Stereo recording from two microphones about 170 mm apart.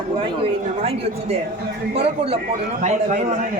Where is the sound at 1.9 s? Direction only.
35° right (ahead or behind).